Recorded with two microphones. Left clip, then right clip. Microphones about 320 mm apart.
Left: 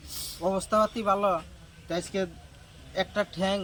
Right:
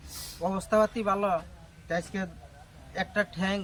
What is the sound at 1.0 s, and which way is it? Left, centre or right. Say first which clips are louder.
Speech: left 2 dB; right.